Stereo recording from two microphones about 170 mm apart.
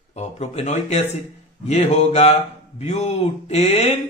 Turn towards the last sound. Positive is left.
turn(degrees=40)  # may be behind; listen again after turning